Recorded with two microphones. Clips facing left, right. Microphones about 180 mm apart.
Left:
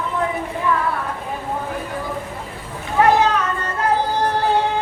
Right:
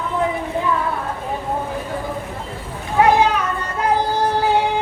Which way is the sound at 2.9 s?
10° right (ahead or behind).